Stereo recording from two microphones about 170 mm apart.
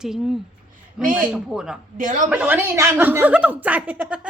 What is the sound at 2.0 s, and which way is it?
Speech, 50° right (ahead or behind).